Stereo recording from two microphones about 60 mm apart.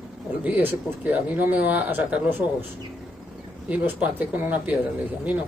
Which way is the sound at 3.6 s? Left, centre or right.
Right.